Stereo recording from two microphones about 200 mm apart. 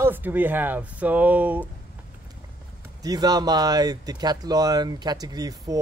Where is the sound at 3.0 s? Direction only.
20° right (ahead or behind).